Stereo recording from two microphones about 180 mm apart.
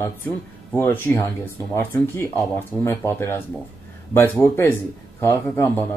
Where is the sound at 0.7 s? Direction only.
10° left (ahead or behind).